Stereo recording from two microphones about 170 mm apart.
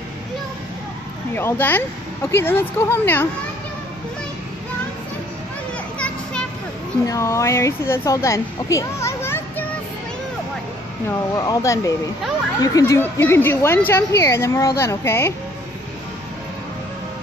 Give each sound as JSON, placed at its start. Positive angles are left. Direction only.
{"t": 1.3, "sound": "a woman's voice", "side_deg": 10}
{"t": 5.9, "sound": "children playing", "side_deg": 5}
{"t": 7.1, "sound": "speech", "side_deg": 15}
{"t": 11.1, "sound": "a woman's voice", "side_deg": 20}